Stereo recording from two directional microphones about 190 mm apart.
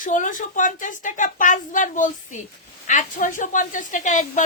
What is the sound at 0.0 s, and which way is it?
A woman's voice, 45° left (ahead or behind).